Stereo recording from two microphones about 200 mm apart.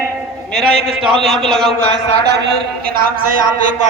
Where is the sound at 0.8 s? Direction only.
Centre (ahead or behind).